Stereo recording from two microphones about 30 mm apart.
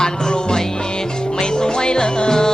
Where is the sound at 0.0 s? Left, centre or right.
Left.